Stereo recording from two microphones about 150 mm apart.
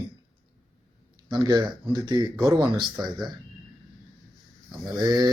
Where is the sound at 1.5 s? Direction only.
30° right (ahead or behind).